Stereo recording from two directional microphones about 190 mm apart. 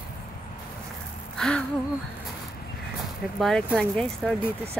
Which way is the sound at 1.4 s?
5° left (ahead or behind).